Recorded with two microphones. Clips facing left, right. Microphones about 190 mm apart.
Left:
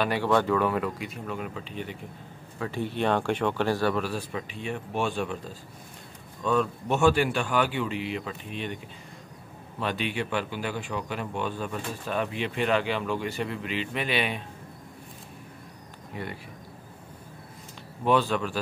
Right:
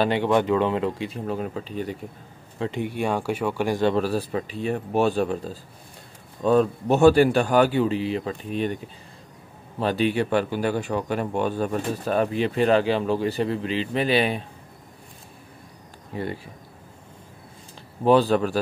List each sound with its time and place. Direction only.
0.0 s speech: 20° right (ahead or behind); by 2.0 s 40° right (ahead or behind)
2.6 s speech: 15° right (ahead or behind)
3.9 s speech: 35° right (ahead or behind)
16.1 s speech: 35° right (ahead or behind)
18.0 s speech: 35° right (ahead or behind)